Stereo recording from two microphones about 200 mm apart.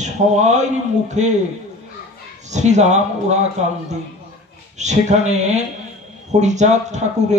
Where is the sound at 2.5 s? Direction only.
35° right (ahead or behind).